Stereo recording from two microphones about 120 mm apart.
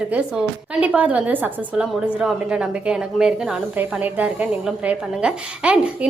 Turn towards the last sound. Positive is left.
turn(degrees=-10)  # may be behind; listen again after turning